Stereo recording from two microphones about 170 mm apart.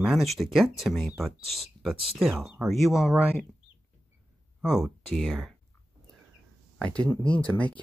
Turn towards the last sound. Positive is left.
turn(degrees=10)  # may be behind; listen again after turning